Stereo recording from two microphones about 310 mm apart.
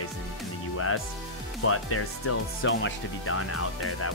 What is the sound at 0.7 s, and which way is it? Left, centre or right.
Music, left.